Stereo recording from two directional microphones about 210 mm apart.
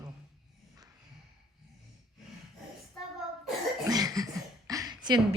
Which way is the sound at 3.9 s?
15° right (ahead or behind).